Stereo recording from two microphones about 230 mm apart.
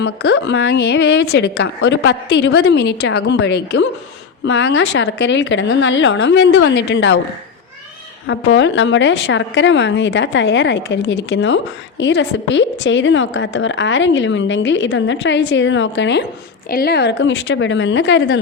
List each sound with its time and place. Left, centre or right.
0.0 s a woman's voice: left
8.3 s a woman's voice: left